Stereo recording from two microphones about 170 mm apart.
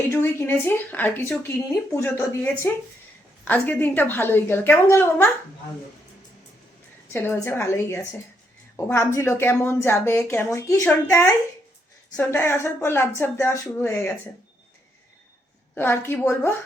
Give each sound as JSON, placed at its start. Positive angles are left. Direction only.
{"t": 0.1, "sound": "a woman's voice", "side_deg": 15}
{"t": 7.1, "sound": "a woman's voice", "side_deg": 15}
{"t": 15.7, "sound": "a woman's voice", "side_deg": 10}